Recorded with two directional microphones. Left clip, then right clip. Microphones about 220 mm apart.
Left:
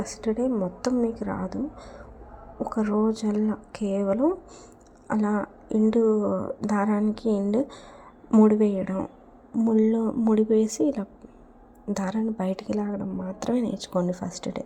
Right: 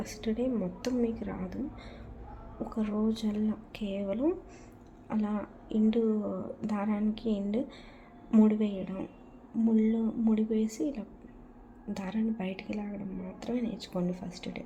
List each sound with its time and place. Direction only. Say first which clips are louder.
0.0 s a woman's voice: left 6 dB; 20° left (ahead or behind)
2.6 s a woman's voice: left 8 dB; 25° left (ahead or behind)